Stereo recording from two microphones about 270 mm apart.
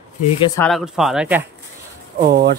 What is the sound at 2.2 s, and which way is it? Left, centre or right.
Speech, right.